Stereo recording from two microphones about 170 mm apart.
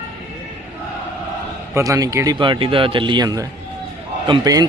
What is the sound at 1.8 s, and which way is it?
A man's voice, 20° right (ahead or behind).